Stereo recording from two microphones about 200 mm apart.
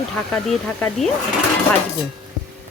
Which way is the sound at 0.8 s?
Centre (ahead or behind).